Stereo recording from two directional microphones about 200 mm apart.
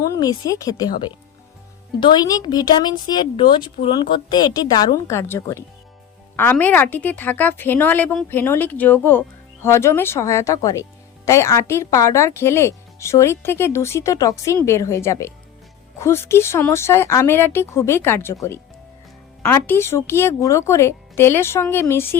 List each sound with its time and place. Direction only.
0.0 s speech: 20° left (ahead or behind)
2.0 s a woman's voice: 20° left (ahead or behind)